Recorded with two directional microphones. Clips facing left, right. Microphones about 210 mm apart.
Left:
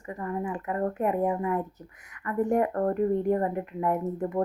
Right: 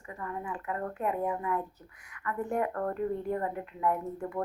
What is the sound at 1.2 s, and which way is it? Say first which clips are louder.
Speech: left 5 dB; 35° left (ahead or behind).